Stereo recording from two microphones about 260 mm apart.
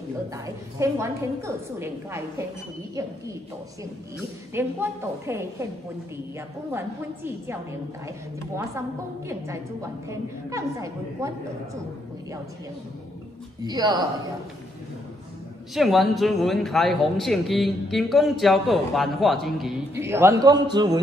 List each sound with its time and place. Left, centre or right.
0.7 s a woman's voice: centre
4.6 s a woman's voice: centre
10.0 s a woman's voice: centre
13.7 s a woman's voice: centre
15.7 s a woman's voice: centre